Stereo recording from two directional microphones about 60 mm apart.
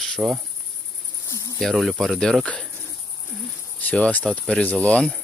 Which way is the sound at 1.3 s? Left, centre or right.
Left.